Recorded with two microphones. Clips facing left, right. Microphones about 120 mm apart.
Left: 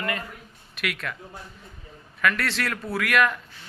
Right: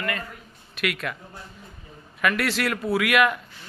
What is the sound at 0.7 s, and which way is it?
Speech, centre (ahead or behind).